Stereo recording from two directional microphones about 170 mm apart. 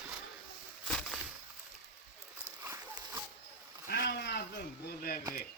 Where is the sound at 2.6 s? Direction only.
15° right (ahead or behind).